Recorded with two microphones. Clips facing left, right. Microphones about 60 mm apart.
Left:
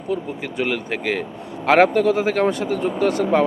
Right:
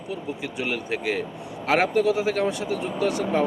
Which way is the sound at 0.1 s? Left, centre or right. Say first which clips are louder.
Left 6 dB; left.